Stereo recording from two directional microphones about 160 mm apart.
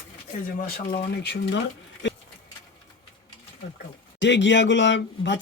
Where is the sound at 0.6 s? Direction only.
75° left (ahead or behind).